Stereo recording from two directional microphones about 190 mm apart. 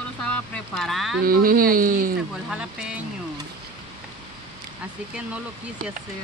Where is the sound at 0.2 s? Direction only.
5° left (ahead or behind).